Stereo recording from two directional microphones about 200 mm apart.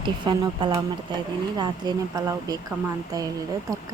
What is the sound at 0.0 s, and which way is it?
A woman's voice, 25° right (ahead or behind).